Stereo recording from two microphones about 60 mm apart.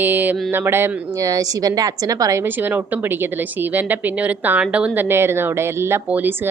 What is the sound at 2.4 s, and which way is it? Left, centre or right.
A woman's voice, right.